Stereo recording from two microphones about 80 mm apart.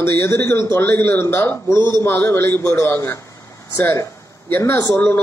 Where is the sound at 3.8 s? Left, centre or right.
Left.